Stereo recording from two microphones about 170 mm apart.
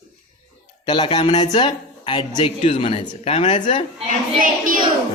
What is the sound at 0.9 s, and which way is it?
Speech, 25° left (ahead or behind).